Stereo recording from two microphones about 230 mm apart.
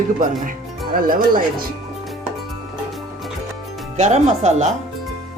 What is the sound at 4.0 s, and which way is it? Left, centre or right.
Speech, right.